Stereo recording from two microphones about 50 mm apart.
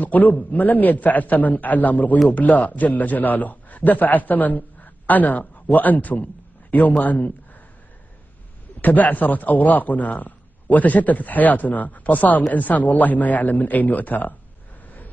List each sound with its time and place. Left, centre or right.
0.0 s a man's voice: left
8.8 s a man's voice: left